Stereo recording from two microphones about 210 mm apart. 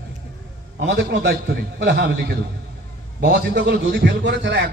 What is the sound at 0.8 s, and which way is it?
A man's voice, 55° right (ahead or behind).